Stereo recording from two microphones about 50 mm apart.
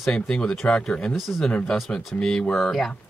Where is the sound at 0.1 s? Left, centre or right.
Centre.